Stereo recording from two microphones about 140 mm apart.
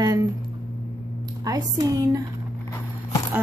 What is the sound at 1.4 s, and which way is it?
Speech, 25° right (ahead or behind).